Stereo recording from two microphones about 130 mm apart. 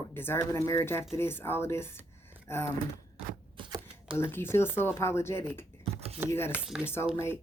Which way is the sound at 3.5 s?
40° right (ahead or behind).